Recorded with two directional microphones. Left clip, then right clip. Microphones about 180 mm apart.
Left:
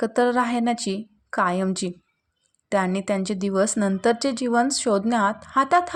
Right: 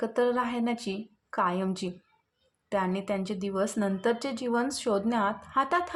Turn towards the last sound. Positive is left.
turn(degrees=20)  # may be behind; listen again after turning